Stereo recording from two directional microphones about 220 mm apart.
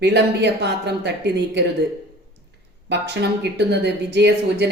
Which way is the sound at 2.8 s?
50° right (ahead or behind).